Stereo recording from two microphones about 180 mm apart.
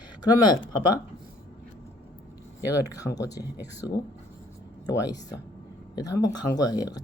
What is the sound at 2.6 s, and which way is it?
Speech, 20° left (ahead or behind).